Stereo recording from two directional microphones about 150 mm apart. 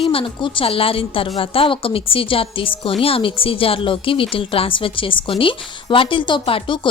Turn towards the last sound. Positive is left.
turn(degrees=30)  # may be behind; listen again after turning